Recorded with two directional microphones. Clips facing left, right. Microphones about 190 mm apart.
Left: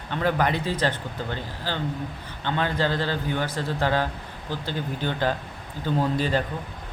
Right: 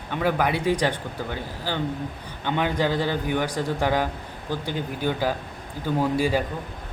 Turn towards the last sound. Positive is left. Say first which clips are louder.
# right 2 dB
turn(degrees=-10)  # may be behind; listen again after turning